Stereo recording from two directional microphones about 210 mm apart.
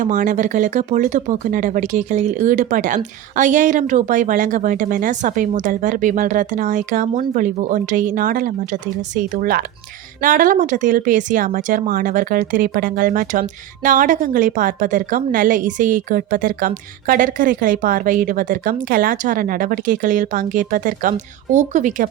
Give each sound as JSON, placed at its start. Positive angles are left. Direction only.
{"t": 0.0, "sound": "a woman's voice", "side_deg": -35}